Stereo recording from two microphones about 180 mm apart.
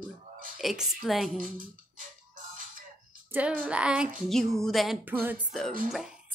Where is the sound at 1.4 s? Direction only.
50° right (ahead or behind).